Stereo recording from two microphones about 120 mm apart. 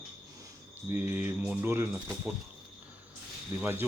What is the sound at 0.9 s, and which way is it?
Speech, 20° right (ahead or behind).